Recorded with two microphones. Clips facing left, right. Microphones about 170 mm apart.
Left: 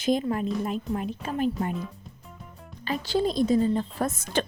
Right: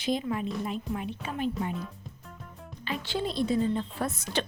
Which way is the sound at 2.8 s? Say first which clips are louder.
Left 6 dB; 40° left (ahead or behind).